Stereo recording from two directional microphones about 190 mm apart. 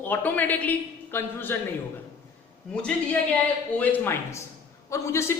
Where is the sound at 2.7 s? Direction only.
5° left (ahead or behind).